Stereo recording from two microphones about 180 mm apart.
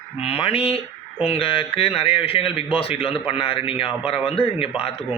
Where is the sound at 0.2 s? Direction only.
35° left (ahead or behind).